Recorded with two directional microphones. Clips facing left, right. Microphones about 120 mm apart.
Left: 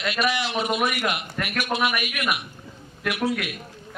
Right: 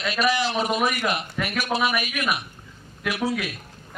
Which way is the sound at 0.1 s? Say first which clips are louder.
Right 3 dB; 40° right (ahead or behind).